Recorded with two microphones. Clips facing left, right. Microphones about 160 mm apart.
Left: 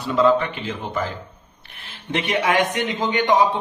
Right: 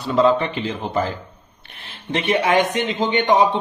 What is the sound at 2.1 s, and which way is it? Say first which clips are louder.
A man's voice: right 2 dB; 30° right (ahead or behind).